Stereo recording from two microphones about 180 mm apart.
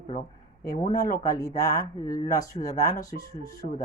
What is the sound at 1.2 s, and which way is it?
Speech, 20° left (ahead or behind).